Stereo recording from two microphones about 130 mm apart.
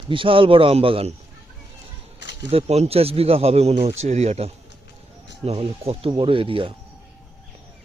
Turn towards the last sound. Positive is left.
turn(degrees=-45)  # may be behind; listen again after turning